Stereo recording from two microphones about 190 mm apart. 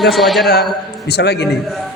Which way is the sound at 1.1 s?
60° left (ahead or behind).